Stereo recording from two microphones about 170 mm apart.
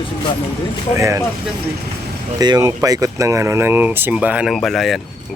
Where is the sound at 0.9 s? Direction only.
20° right (ahead or behind).